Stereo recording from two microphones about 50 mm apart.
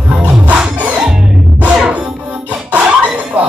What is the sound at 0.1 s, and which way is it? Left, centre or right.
Music, right.